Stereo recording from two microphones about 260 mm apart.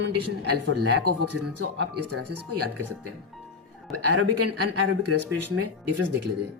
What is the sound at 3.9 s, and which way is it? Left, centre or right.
Speech, right.